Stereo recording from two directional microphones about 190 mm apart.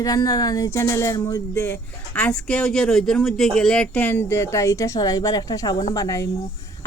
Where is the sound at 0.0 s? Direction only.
20° left (ahead or behind).